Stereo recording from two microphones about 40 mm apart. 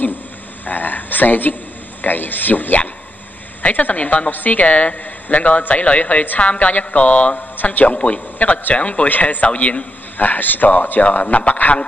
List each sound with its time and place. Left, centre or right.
0.7 s a man's voice: left
7.5 s speech: left
7.9 s a man's voice: left
10.1 s a man's voice: left